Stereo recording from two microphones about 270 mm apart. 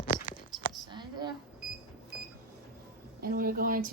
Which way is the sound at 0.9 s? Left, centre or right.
Centre.